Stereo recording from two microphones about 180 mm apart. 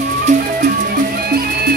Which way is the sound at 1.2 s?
60° right (ahead or behind).